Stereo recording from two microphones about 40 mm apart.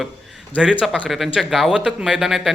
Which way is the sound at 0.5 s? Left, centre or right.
Right.